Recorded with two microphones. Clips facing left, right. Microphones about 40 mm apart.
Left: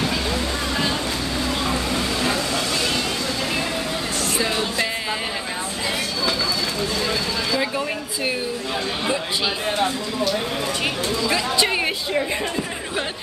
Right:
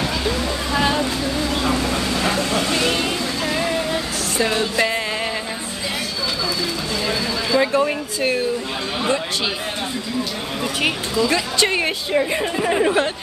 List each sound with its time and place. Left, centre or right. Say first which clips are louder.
2.2 s vehicle: right 3 dB; right
4.5 s music: right 3 dB; centre
7.1 s a sound: right 2 dB; centre
11.2 s a woman's voice: right 1 dB; centre